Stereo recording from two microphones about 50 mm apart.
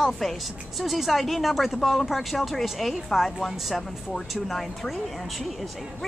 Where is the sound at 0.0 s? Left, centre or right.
Centre.